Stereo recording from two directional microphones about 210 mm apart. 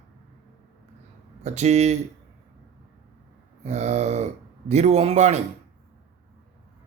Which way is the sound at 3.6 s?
35° right (ahead or behind).